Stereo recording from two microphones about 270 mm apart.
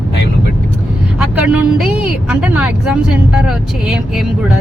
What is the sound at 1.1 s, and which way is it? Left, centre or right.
Speech, centre.